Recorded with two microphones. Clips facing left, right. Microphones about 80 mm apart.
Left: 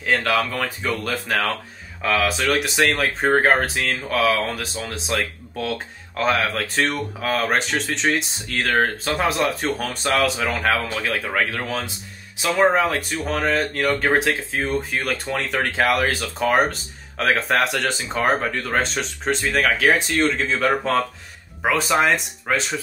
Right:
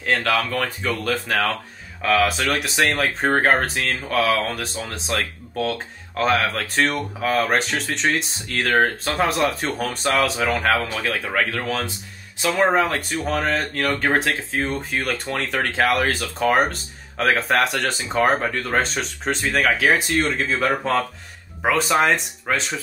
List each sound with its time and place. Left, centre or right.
0.0 s speech: centre